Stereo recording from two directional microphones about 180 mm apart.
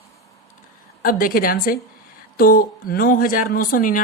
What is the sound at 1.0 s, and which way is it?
Speech, 50° left (ahead or behind).